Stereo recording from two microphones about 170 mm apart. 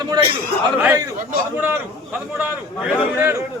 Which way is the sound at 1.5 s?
10° right (ahead or behind).